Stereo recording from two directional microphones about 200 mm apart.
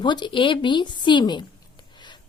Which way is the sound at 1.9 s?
20° left (ahead or behind).